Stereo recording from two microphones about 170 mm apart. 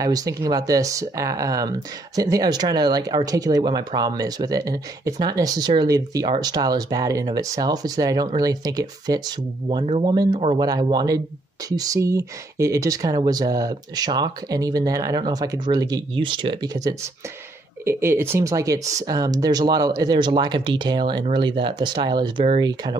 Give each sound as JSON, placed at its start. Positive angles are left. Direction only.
{"t": 0.0, "sound": "speech", "side_deg": -20}
{"t": 10.6, "sound": "speech", "side_deg": -25}